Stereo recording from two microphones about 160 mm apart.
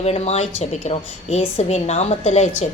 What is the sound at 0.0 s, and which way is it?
A woman's voice, 40° left (ahead or behind).